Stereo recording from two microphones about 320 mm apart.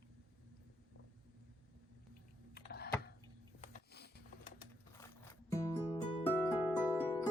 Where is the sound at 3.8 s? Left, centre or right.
Left.